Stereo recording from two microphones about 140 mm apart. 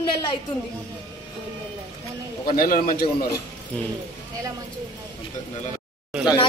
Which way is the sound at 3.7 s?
10° left (ahead or behind).